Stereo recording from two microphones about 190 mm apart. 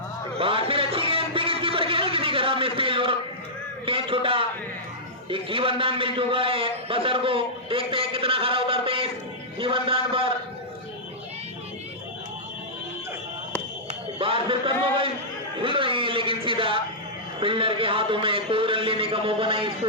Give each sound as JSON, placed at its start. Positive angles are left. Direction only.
{"t": 0.3, "sound": "a sound", "side_deg": -30}
{"t": 3.8, "sound": "a man's voice", "side_deg": -30}
{"t": 14.2, "sound": "a man's voice", "side_deg": -30}
{"t": 15.5, "sound": "music", "side_deg": -25}
{"t": 17.4, "sound": "a man's voice", "side_deg": -30}